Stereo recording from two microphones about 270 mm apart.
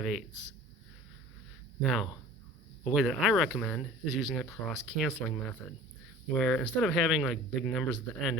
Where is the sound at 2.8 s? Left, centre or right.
Centre.